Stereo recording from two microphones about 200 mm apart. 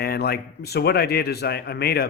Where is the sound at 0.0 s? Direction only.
50° left (ahead or behind).